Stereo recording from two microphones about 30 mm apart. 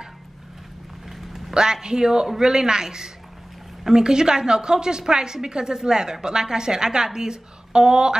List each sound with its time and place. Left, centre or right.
1.0 s vehicle: centre
1.5 s a woman's voice: right